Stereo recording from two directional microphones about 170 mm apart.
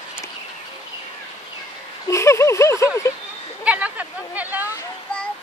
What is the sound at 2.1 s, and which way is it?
Speech, 15° left (ahead or behind).